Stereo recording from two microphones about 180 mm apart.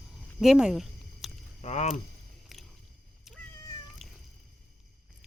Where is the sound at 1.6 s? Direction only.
40° left (ahead or behind).